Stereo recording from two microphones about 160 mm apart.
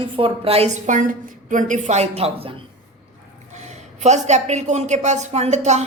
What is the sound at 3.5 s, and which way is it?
A woman's voice, 45° right (ahead or behind).